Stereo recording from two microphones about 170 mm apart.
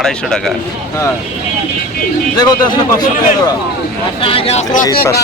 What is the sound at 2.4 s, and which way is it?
Speech, 25° left (ahead or behind).